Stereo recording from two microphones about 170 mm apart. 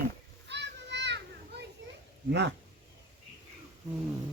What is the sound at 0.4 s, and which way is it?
Children playing, 90° right.